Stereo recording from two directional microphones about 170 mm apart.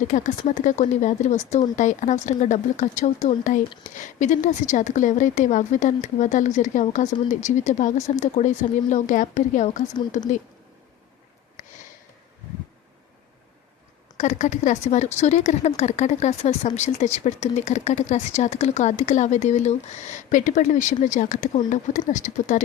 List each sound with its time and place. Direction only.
0.1 s speech: 45° left (ahead or behind)
14.2 s speech: 45° left (ahead or behind)